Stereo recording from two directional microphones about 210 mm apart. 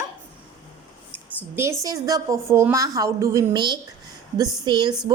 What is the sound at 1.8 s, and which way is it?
A woman's voice, 15° right (ahead or behind).